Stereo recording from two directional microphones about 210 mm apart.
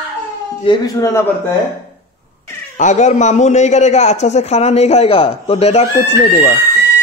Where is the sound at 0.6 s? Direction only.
15° left (ahead or behind).